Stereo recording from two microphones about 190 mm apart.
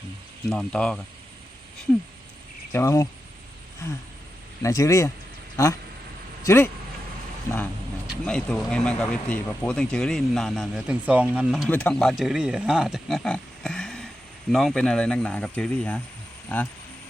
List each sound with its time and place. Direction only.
0.5 s speech: 5° left (ahead or behind)
2.7 s speech: 15° left (ahead or behind)
4.6 s speech: 15° left (ahead or behind)
6.4 s speech: 15° left (ahead or behind)
8.0 s speech: centre (ahead or behind)
11.7 s speech: 5° left (ahead or behind)